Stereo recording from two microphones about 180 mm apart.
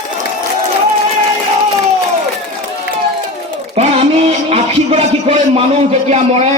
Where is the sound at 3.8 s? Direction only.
35° right (ahead or behind).